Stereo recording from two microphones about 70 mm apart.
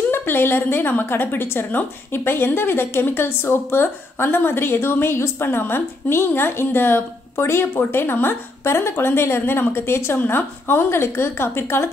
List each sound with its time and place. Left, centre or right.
0.1 s a woman's voice: left